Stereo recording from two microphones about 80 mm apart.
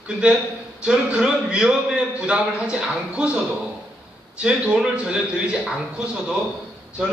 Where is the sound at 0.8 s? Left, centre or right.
Centre.